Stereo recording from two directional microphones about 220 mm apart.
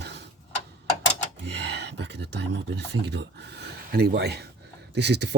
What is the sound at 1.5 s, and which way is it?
Speech, 50° right (ahead or behind).